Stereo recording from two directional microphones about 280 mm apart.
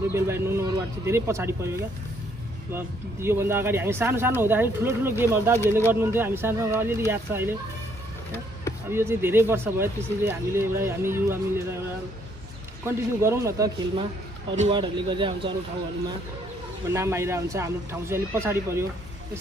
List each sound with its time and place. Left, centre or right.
0.1 s speech: centre
8.9 s speech: centre
12.8 s speech: centre
16.9 s speech: centre